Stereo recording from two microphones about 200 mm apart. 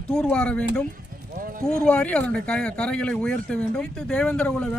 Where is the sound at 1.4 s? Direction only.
45° right (ahead or behind).